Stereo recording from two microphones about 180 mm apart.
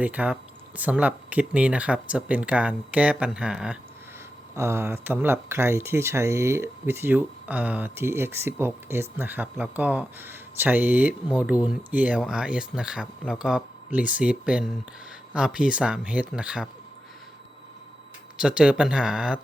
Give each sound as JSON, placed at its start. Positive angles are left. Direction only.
{"t": 0.0, "sound": "speech", "side_deg": -10}
{"t": 18.3, "sound": "speech", "side_deg": -5}